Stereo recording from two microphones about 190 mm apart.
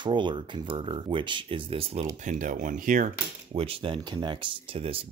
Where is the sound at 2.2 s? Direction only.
45° right (ahead or behind).